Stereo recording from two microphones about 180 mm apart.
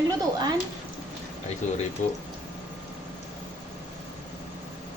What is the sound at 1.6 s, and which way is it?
Speech, 40° left (ahead or behind).